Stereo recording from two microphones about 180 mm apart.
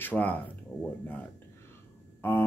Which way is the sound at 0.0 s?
10° left (ahead or behind).